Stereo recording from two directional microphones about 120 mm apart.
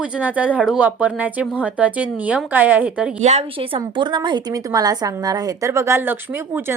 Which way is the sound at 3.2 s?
65° right (ahead or behind).